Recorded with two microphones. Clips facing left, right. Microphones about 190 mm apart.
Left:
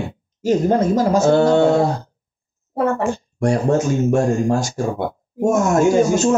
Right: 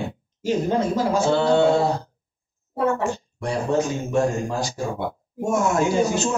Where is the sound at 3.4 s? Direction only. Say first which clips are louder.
Left 7 dB; 45° left (ahead or behind).